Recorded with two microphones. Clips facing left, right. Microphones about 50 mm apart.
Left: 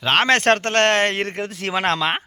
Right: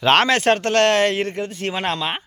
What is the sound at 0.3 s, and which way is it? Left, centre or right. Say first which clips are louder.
Speech: left 1 dB; left.